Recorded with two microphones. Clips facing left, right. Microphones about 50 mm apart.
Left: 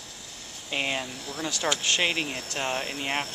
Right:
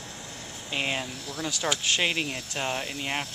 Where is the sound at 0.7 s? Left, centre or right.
Centre.